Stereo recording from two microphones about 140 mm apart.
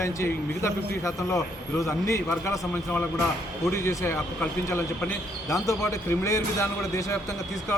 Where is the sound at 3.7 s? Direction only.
20° left (ahead or behind).